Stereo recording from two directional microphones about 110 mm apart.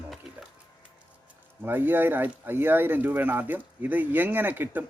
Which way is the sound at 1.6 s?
20° right (ahead or behind).